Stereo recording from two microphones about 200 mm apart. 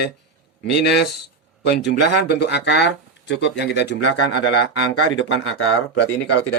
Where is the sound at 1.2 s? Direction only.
55° left (ahead or behind); by 5.7 s 85° left.